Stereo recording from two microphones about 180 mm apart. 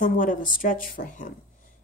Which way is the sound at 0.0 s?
45° left (ahead or behind).